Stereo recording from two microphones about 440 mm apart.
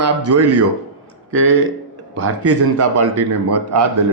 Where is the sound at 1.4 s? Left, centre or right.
Right.